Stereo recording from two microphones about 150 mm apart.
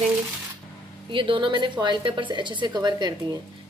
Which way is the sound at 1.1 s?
35° right (ahead or behind).